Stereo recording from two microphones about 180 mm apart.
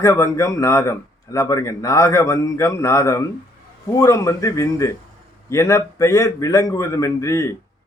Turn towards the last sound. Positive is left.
turn(degrees=15)  # may be behind; listen again after turning